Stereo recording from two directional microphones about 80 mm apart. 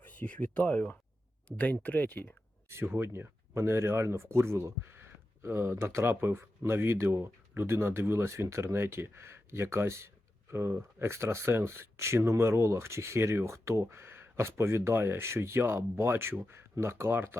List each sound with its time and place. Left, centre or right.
0.0 s speech: left
2.6 s speech: right